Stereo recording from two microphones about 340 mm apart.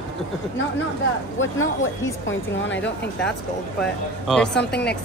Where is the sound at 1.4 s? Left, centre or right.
Left.